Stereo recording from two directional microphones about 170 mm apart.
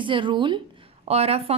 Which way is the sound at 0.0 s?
30° right (ahead or behind).